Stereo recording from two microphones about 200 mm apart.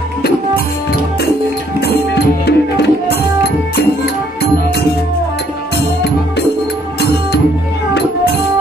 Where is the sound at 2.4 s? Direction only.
55° left (ahead or behind).